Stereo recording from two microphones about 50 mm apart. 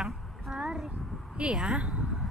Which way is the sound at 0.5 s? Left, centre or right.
Centre.